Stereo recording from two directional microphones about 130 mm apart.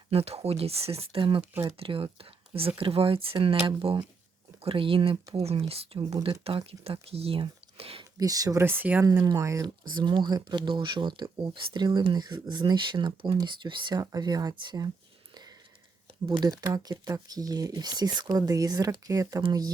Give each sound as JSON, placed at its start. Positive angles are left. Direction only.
{"t": 0.1, "sound": "speech", "side_deg": -50}
{"t": 8.2, "sound": "speech", "side_deg": -25}
{"t": 9.2, "sound": "speech", "side_deg": -25}
{"t": 16.3, "sound": "speech", "side_deg": -30}